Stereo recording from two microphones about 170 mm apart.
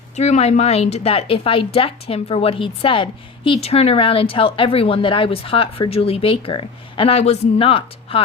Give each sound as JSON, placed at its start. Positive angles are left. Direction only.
{"t": 0.2, "sound": "a woman's voice", "side_deg": 40}